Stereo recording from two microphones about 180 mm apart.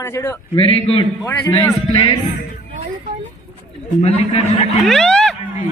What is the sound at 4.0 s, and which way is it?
Speech, 35° left (ahead or behind).